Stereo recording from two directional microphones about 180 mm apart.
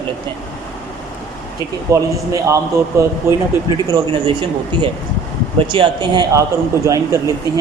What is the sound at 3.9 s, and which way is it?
A man's voice, 30° right (ahead or behind).